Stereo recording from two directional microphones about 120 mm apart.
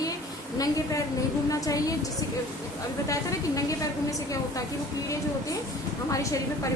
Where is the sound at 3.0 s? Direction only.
30° left (ahead or behind).